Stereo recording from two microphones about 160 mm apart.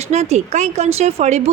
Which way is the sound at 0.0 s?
45° right (ahead or behind).